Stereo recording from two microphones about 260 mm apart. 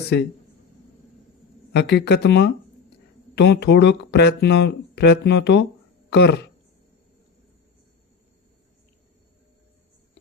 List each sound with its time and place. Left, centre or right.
1.7 s speech: left